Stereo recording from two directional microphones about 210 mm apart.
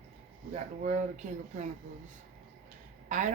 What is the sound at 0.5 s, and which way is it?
Speech, 35° right (ahead or behind).